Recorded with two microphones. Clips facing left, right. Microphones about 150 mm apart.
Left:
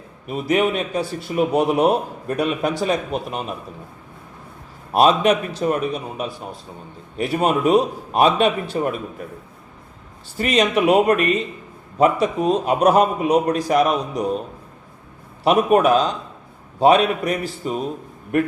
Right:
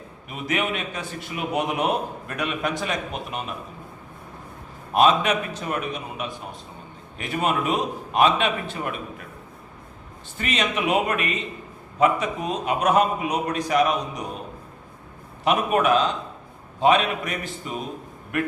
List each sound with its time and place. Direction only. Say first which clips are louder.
0.3 s a man's voice: left 7 dB; 35° left (ahead or behind)
4.9 s a man's voice: left 4 dB; 35° left (ahead or behind)
10.3 s a man's voice: left 8 dB; 40° left (ahead or behind)
15.4 s a man's voice: left 5 dB; 35° left (ahead or behind)